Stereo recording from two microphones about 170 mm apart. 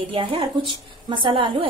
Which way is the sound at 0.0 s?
30° right (ahead or behind).